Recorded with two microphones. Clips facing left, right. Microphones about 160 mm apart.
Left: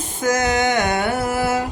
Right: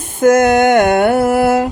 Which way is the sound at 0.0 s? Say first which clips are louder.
Right 10 dB; 55° right (ahead or behind).